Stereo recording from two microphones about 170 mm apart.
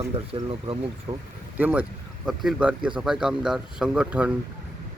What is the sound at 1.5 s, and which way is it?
A man's voice, 10° right (ahead or behind).